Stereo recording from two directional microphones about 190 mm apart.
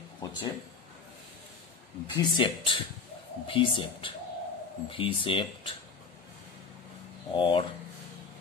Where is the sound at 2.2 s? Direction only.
25° left (ahead or behind).